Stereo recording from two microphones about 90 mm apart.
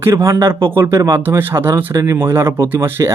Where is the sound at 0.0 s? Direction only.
30° right (ahead or behind).